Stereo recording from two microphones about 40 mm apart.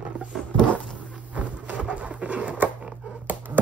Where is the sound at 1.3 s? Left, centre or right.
Right.